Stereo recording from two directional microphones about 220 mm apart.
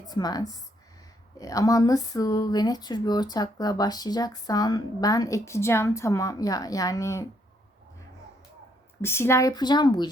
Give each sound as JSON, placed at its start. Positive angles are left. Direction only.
{"t": 0.1, "sound": "speech", "side_deg": 15}
{"t": 9.0, "sound": "speech", "side_deg": 10}